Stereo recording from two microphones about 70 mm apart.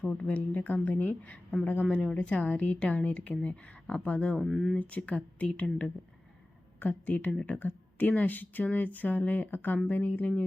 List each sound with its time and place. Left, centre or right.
0.0 s speech: centre
4.4 s speech: centre
4.8 s speech: left
7.3 s speech: centre